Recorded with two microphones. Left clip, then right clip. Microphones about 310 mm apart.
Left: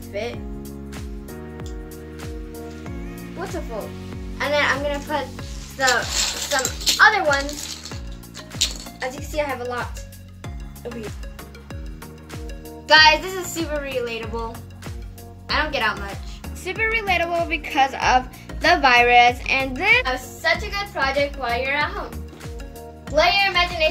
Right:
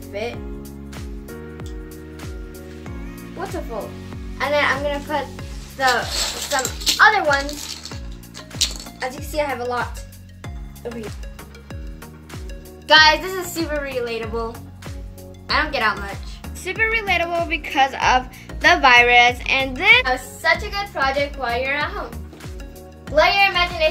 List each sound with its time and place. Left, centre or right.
0.1 s speech: centre
2.8 s music: centre
4.4 s a woman's voice: centre
7.4 s music: centre
12.8 s a woman's voice: centre